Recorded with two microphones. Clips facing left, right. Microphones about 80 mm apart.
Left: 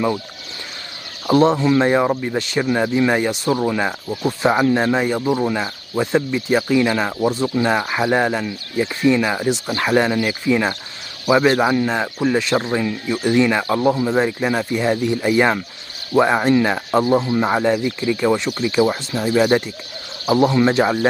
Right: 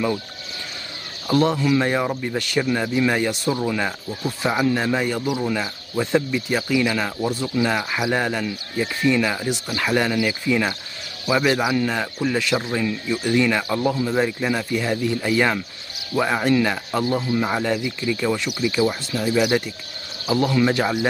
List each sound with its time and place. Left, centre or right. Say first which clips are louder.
1.2 s speech: left 5 dB; left
5.2 s speech: left 5 dB; left
5.5 s speech: left 3 dB; centre